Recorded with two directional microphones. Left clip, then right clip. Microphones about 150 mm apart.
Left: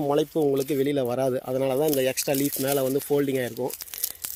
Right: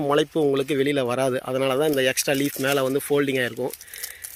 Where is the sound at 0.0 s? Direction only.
Centre (ahead or behind).